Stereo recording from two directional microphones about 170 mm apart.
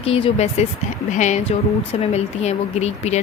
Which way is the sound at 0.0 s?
35° left (ahead or behind).